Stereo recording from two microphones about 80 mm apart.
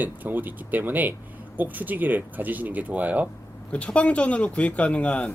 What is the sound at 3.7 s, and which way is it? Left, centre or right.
Speech, centre.